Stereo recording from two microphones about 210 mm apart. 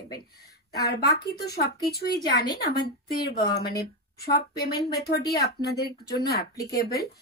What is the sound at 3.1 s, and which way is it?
Speech, 50° left (ahead or behind).